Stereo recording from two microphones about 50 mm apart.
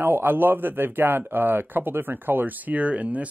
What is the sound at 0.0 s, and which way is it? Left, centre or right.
Speech, right.